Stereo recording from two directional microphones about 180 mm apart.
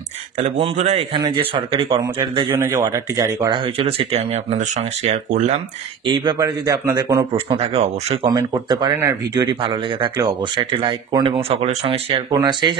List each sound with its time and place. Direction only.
0.7 s speech: 40° right (ahead or behind)
1.1 s speech: 25° right (ahead or behind)
2.5 s speech: 15° right (ahead or behind); by 5.6 s 40° right (ahead or behind)
6.0 s speech: 25° right (ahead or behind)
7.3 s speech: 35° right (ahead or behind)
12.4 s speech: 25° right (ahead or behind)